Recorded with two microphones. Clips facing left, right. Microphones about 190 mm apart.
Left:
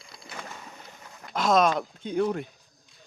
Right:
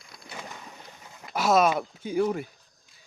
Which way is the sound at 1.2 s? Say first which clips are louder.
Even; 5° right (ahead or behind).